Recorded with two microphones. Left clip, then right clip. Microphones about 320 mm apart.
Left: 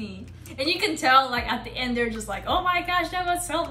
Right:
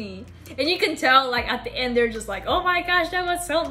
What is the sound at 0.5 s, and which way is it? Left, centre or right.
Speech, centre.